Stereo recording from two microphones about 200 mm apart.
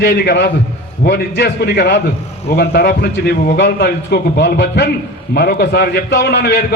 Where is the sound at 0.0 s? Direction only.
60° left (ahead or behind).